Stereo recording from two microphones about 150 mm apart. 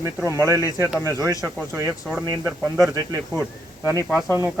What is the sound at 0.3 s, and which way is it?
Speech, 20° right (ahead or behind).